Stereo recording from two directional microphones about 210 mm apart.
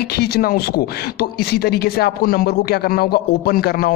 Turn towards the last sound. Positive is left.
turn(degrees=45)  # may be behind; listen again after turning